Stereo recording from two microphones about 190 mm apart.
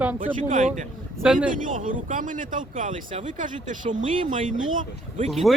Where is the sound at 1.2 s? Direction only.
5° right (ahead or behind).